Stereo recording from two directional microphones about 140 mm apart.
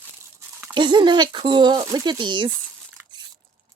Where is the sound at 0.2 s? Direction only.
20° right (ahead or behind).